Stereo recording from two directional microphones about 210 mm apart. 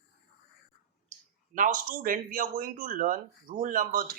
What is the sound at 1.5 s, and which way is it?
Speech, 40° right (ahead or behind).